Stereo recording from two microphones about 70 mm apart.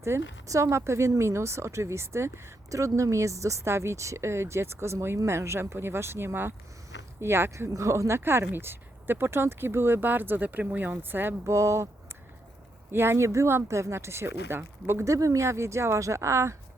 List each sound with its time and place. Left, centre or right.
0.0 s speech: right
7.7 s speech: right
11.4 s speech: right
12.9 s speech: right
15.1 s speech: right